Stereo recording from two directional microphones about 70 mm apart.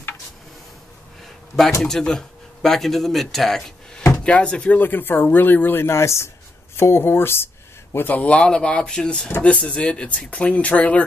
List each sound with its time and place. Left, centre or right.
1.8 s speech: centre